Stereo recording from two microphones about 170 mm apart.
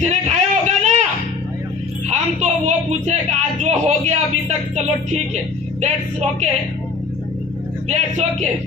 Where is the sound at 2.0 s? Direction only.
45° right (ahead or behind).